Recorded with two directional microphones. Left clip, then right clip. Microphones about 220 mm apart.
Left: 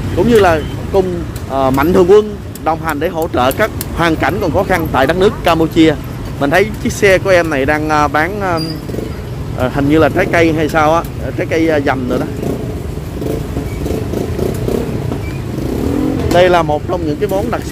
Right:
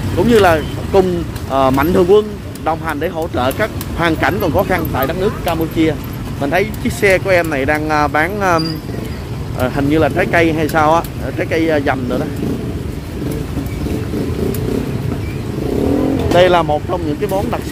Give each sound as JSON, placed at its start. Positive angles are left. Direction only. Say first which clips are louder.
{"t": 0.2, "sound": "speech", "louder": "left 1 dB", "side_deg": 0}
{"t": 4.9, "sound": "speech", "louder": "left 6 dB", "side_deg": 20}
{"t": 9.6, "sound": "speech", "louder": "left 3 dB", "side_deg": 10}
{"t": 16.3, "sound": "speech", "louder": "left 1 dB", "side_deg": 5}